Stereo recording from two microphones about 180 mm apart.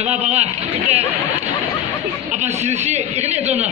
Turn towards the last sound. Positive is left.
turn(degrees=-40)  # may be behind; listen again after turning